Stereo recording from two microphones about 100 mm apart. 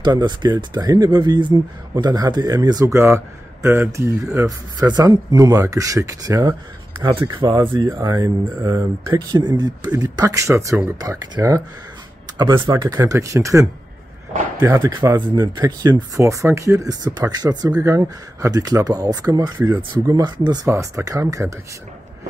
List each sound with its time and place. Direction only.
0.0 s speech: 45° right (ahead or behind)
2.9 s speech: 25° right (ahead or behind)
7.2 s speech: 45° right (ahead or behind); by 9.2 s 30° right (ahead or behind)
9.3 s speech: 45° right (ahead or behind)
12.4 s speech: 45° right (ahead or behind)
14.9 s speech: 45° right (ahead or behind)
20.7 s speech: 30° right (ahead or behind)